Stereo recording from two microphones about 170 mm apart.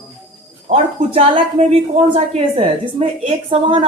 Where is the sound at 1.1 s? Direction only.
35° right (ahead or behind).